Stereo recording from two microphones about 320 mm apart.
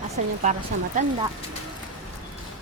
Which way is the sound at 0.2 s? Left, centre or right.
Right.